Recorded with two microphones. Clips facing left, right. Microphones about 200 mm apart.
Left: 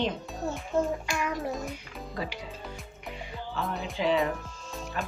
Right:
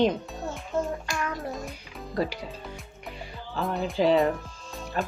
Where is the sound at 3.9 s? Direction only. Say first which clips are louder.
Right 5 dB; 35° right (ahead or behind).